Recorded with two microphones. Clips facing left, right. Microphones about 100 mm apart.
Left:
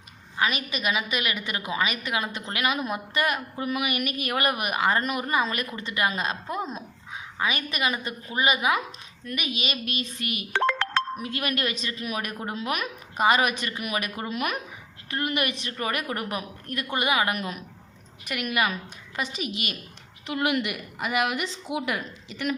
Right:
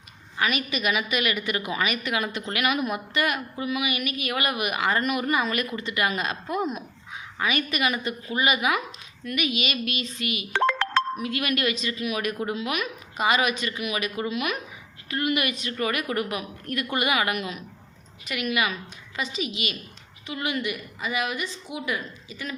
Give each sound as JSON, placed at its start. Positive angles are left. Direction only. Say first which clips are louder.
{"t": 0.3, "sound": "a woman's voice", "louder": "right 1 dB", "side_deg": 30}
{"t": 20.2, "sound": "a woman's voice", "louder": "left 3 dB", "side_deg": 75}